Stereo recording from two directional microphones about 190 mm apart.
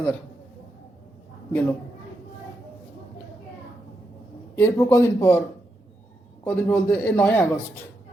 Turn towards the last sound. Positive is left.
turn(degrees=10)  # may be behind; listen again after turning